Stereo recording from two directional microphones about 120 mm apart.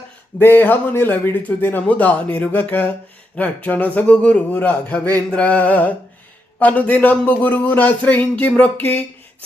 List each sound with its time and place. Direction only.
0.3 s a man's voice: 15° left (ahead or behind)